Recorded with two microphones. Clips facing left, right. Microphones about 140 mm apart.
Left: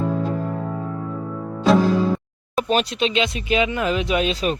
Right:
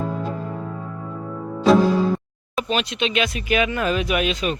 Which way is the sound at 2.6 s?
40° left (ahead or behind).